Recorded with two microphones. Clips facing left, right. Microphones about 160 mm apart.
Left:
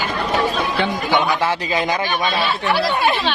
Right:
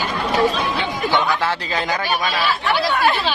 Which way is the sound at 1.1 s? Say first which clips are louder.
Even; 15° left (ahead or behind).